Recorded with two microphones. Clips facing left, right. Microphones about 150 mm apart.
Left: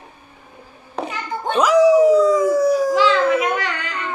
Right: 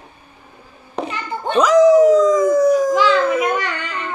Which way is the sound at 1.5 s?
5° left (ahead or behind).